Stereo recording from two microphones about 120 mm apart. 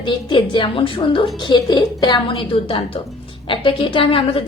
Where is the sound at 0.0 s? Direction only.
45° left (ahead or behind).